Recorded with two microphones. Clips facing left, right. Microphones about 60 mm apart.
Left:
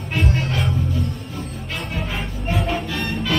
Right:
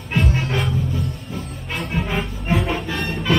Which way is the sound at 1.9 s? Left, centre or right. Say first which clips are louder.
Right 6 dB; centre.